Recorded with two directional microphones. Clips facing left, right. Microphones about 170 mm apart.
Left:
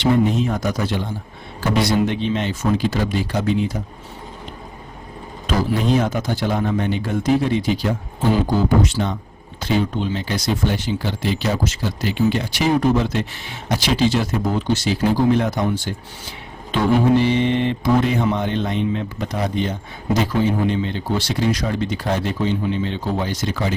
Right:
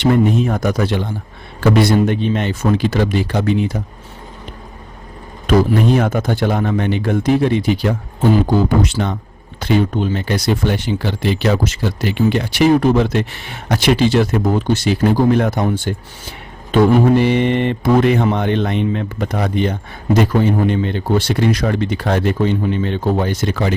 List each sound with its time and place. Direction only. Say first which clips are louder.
0.0 s speech: right 3 dB; 55° right (ahead or behind)
6.0 s speech: right 4 dB; 55° right (ahead or behind)